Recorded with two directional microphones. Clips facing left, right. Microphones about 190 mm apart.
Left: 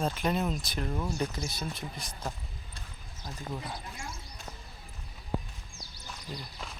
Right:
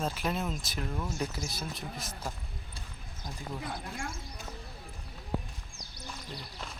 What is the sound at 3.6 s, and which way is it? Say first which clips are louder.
Speech: right 3 dB; 55° right (ahead or behind).